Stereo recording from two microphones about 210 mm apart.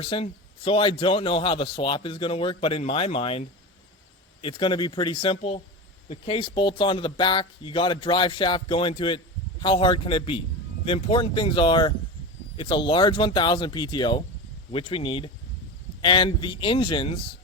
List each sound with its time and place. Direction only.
0.0 s speech: 25° left (ahead or behind)